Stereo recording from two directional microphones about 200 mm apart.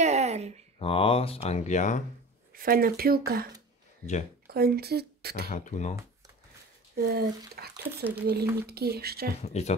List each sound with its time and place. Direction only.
0.0 s a sound: 35° right (ahead or behind)
0.7 s speech: 30° left (ahead or behind)
2.5 s speech: 45° right (ahead or behind)
4.5 s speech: 50° right (ahead or behind)
5.5 s speech: 35° left (ahead or behind)
7.0 s speech: 50° right (ahead or behind)
9.4 s speech: 35° left (ahead or behind)